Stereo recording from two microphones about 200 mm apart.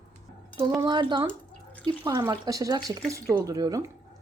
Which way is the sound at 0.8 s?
20° right (ahead or behind).